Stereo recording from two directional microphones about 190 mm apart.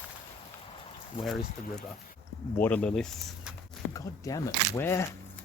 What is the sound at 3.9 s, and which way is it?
Speech, 15° left (ahead or behind).